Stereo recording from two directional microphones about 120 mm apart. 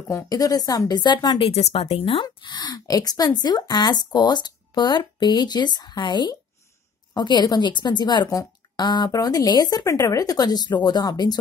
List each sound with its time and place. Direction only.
0.1 s a woman's voice: 30° left (ahead or behind)
1.5 s a woman's voice: 55° left (ahead or behind); by 11.3 s 35° left (ahead or behind)